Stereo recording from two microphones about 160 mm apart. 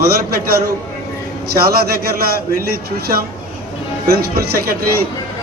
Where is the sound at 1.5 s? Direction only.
75° right (ahead or behind).